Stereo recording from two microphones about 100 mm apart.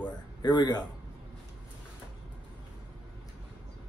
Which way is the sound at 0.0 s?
45° left (ahead or behind).